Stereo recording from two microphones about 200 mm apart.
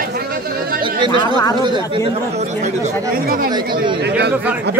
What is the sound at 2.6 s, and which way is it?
Speech, 40° right (ahead or behind).